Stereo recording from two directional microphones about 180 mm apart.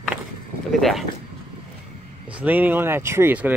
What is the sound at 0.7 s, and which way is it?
Speech, centre (ahead or behind).